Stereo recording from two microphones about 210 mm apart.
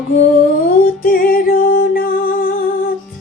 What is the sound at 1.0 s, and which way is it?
Music, 45° left (ahead or behind).